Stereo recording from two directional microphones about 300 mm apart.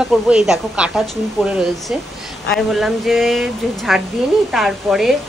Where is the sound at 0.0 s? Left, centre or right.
Centre.